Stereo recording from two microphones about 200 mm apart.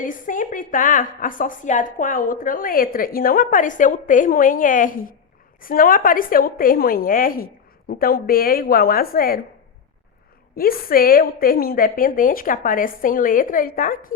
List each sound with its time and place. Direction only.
0.0 s a woman's voice: 40° left (ahead or behind)
10.5 s a woman's voice: 45° left (ahead or behind)